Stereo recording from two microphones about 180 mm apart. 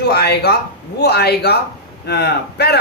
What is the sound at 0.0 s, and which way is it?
A man's voice, 65° left (ahead or behind).